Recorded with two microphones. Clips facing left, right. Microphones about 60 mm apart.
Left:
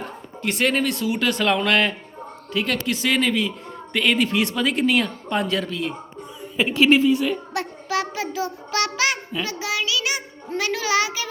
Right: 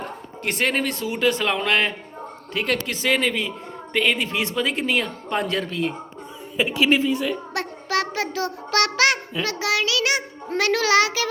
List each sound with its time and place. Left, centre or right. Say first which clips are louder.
0.4 s speech: left 2 dB; right
2.5 s a man's voice: left 1 dB; right
6.6 s speech: left 3 dB; centre
7.5 s a sound: even; right
9.5 s a child's voice: right 4 dB; right